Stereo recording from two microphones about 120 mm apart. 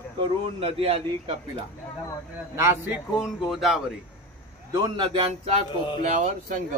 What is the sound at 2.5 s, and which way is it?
Speech, 20° right (ahead or behind).